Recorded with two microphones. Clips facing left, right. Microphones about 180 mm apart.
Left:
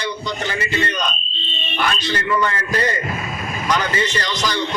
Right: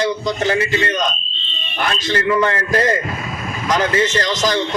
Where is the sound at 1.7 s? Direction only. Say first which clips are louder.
Right 1 dB; 45° right (ahead or behind).